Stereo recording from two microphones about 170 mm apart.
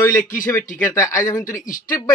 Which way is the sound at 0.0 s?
15° left (ahead or behind).